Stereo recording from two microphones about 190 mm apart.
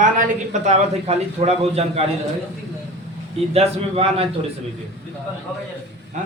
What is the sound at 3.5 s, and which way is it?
Speech, 30° right (ahead or behind).